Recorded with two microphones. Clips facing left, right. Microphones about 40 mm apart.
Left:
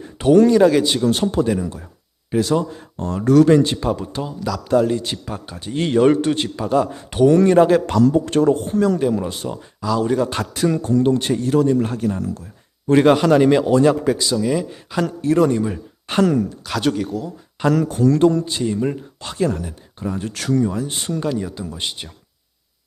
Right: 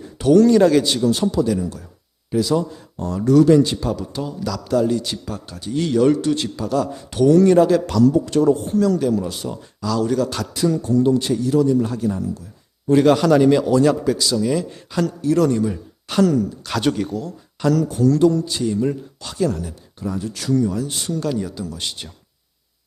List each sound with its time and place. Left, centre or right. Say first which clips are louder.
0.0 s a sound: left 1 dB; left
0.5 s a man's voice: even; centre
1.0 s a man's voice: even; left
8.8 s speech: even; left
13.1 s a man's voice: even; left
13.7 s speech: left 1 dB; left
14.1 s a man's voice: even; centre
15.0 s a man's voice: left 1 dB; left
16.0 s speech: even; left
16.6 s speech: even; centre
17.6 s speech: left 1 dB; left
20.2 s speech: even; left
20.6 s a man's voice: even; left
21.2 s a man's voice: even; centre